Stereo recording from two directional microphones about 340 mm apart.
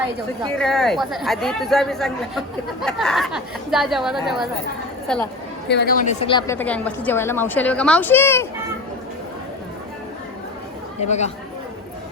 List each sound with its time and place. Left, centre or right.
0.5 s speech: centre
5.6 s a woman's voice: left; by 8.4 s centre
11.0 s speech: centre